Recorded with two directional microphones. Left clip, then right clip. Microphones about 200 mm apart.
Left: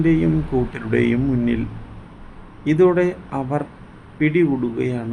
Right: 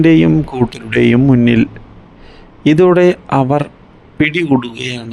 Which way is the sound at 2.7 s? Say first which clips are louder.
Right 7 dB; 45° right (ahead or behind).